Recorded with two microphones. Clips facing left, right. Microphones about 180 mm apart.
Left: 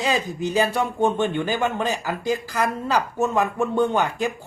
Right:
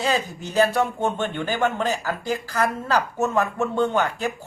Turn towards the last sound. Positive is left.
turn(degrees=15)  # may be behind; listen again after turning